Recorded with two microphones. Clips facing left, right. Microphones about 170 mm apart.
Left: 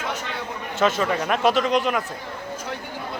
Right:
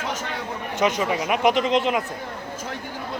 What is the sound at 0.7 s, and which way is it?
Speech, 15° right (ahead or behind).